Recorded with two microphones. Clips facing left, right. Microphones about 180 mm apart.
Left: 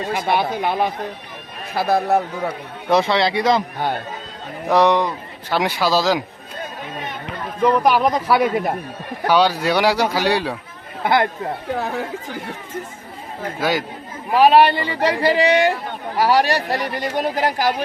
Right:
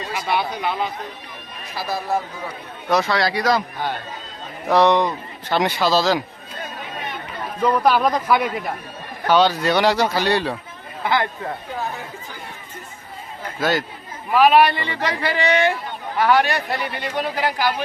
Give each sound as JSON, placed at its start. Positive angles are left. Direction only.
{"t": 0.0, "sound": "a man's voice", "side_deg": 55}
{"t": 2.9, "sound": "speech", "side_deg": 25}
{"t": 4.7, "sound": "speech", "side_deg": 10}
{"t": 7.6, "sound": "speech", "side_deg": 15}
{"t": 9.2, "sound": "speech", "side_deg": 10}
{"t": 11.0, "sound": "a man's voice", "side_deg": 50}
{"t": 13.6, "sound": "speech", "side_deg": 10}
{"t": 14.3, "sound": "speech", "side_deg": 35}